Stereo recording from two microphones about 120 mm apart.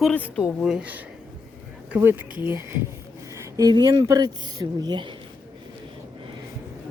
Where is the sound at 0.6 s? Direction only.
10° right (ahead or behind).